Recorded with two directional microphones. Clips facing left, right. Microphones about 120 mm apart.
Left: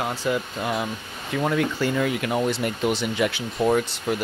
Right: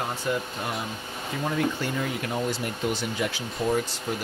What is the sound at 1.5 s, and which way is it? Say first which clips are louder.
Speech: left 3 dB; 90° left.